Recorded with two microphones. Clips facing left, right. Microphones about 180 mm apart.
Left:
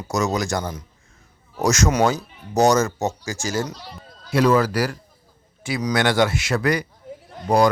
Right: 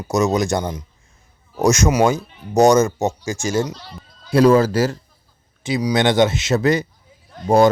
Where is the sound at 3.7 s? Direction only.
10° left (ahead or behind).